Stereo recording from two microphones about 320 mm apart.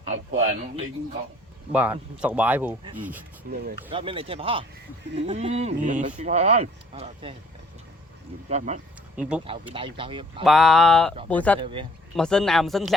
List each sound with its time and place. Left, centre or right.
0.3 s speech: right
1.7 s speech: centre
3.5 s speech: right
3.9 s speech: centre
8.4 s speech: right
9.2 s speech: centre
9.7 s speech: centre
10.4 s speech: centre
11.6 s speech: centre
12.1 s speech: centre